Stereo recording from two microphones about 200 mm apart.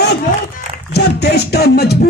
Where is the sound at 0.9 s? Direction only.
55° left (ahead or behind).